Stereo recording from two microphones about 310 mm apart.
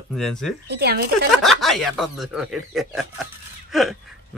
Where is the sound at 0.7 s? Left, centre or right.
Right.